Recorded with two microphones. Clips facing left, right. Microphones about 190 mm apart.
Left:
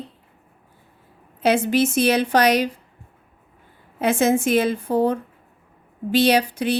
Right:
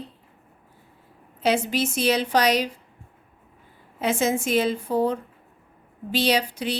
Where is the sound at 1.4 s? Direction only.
50° left (ahead or behind).